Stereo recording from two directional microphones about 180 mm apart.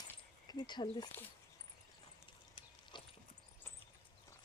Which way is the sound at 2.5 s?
25° left (ahead or behind).